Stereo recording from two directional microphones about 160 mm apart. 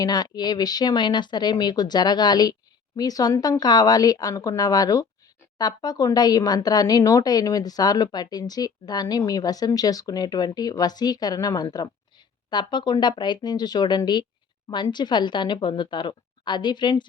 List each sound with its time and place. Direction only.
0.0 s speech: 25° left (ahead or behind)